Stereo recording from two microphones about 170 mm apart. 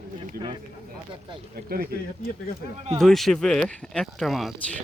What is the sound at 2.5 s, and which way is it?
Speech, 65° left (ahead or behind).